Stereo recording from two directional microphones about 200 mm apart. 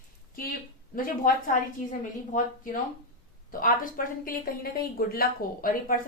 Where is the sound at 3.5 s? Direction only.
45° left (ahead or behind).